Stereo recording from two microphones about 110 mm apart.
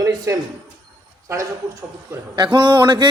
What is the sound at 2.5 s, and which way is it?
Speech, 45° right (ahead or behind).